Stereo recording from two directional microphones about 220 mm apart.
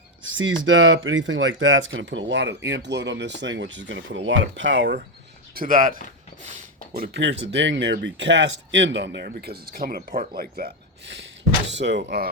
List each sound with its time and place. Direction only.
0.6 s speech: 60° right (ahead or behind)
5.5 s speech: 40° right (ahead or behind)